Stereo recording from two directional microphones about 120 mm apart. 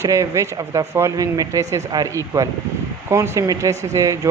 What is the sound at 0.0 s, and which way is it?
Speech, 25° right (ahead or behind).